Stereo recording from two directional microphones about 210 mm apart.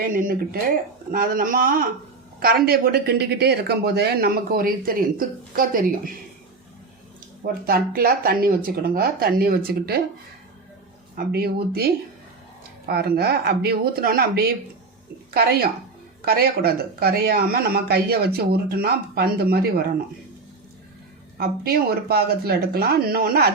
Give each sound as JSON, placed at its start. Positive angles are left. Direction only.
{"t": 0.0, "sound": "speech", "side_deg": -40}
{"t": 7.4, "sound": "speech", "side_deg": -45}
{"t": 11.3, "sound": "speech", "side_deg": -45}
{"t": 21.3, "sound": "speech", "side_deg": -45}